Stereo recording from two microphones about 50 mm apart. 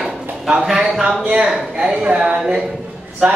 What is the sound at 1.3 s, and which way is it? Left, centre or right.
Speech, centre.